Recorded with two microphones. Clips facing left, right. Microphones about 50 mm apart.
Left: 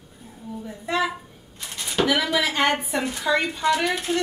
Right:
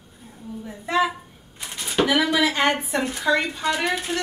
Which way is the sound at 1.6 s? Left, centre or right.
Centre.